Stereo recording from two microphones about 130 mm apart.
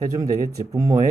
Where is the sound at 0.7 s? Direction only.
25° right (ahead or behind).